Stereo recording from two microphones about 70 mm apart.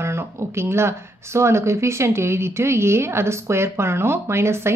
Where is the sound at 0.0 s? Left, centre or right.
Right.